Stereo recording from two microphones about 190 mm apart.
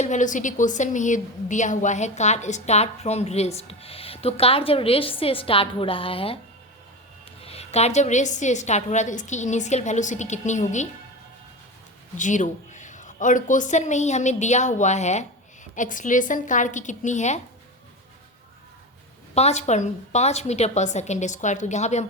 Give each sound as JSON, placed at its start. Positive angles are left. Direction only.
{"t": 0.0, "sound": "a woman's voice", "side_deg": 40}
{"t": 7.4, "sound": "a woman's voice", "side_deg": 35}
{"t": 12.1, "sound": "a woman's voice", "side_deg": 40}
{"t": 19.3, "sound": "a woman's voice", "side_deg": 35}